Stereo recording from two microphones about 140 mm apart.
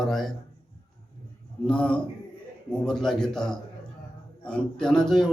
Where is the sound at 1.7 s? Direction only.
5° left (ahead or behind).